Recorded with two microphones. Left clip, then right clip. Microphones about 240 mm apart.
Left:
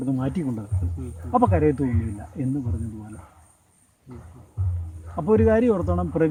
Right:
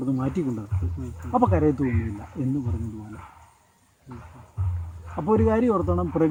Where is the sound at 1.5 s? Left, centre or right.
Left.